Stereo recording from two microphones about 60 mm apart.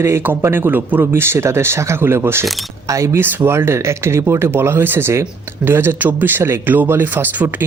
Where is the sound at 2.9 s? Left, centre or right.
Right.